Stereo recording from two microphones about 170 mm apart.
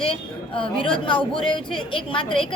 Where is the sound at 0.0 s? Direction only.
30° left (ahead or behind).